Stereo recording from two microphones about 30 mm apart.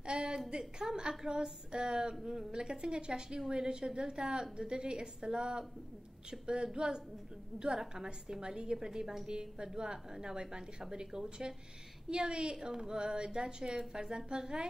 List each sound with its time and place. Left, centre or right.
0.0 s a sound: right
0.5 s a woman's voice: right
9.3 s a woman's voice: right
12.5 s a woman's voice: centre